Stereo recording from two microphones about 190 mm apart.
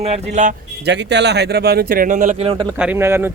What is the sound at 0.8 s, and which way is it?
Speech, 65° right (ahead or behind).